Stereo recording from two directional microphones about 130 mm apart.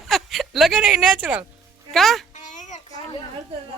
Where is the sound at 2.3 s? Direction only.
70° left (ahead or behind).